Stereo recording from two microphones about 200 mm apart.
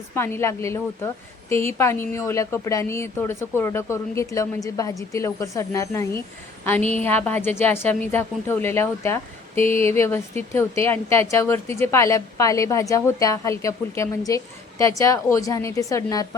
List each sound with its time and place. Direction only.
0.1 s a woman's voice: 10° left (ahead or behind)